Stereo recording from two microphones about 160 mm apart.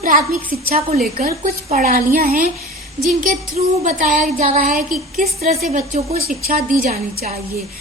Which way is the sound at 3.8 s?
55° right (ahead or behind).